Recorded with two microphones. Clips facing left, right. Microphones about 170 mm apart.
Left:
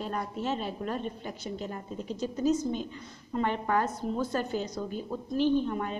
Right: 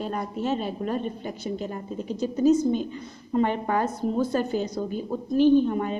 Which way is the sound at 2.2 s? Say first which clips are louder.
Right 7 dB; 10° right (ahead or behind).